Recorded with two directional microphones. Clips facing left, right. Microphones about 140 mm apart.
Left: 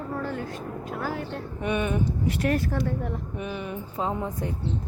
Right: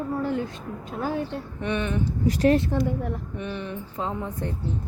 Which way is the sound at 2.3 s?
25° right (ahead or behind).